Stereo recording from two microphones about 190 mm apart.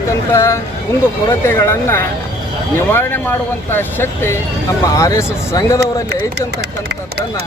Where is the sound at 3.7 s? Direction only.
10° left (ahead or behind).